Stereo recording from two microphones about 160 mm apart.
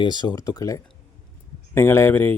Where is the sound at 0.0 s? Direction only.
25° left (ahead or behind).